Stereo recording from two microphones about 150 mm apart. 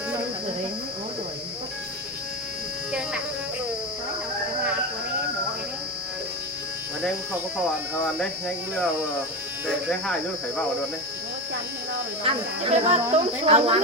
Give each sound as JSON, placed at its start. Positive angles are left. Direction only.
{"t": 8.0, "sound": "speech", "side_deg": 0}
{"t": 12.2, "sound": "speech", "side_deg": -45}